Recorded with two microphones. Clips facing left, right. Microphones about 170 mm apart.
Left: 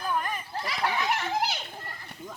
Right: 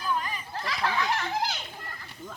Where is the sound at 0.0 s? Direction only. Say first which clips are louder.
Left 1 dB; 55° left (ahead or behind).